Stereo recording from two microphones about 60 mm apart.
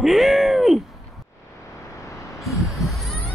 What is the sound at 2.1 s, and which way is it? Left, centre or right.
Hum, centre.